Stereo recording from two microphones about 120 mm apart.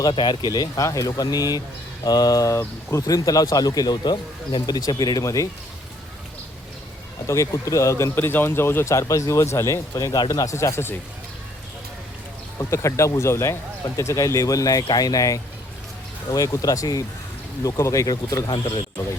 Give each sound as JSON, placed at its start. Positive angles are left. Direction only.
{"t": 0.0, "sound": "speech", "side_deg": 35}
{"t": 7.3, "sound": "speech", "side_deg": 25}
{"t": 9.9, "sound": "speech", "side_deg": 35}
{"t": 12.5, "sound": "speech", "side_deg": 25}
{"t": 18.5, "sound": "speech", "side_deg": 45}